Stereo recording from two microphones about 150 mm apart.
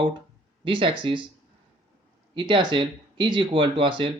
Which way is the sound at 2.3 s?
30° right (ahead or behind).